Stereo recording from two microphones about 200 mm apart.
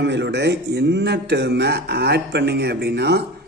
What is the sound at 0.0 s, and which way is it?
Speech, 60° right (ahead or behind).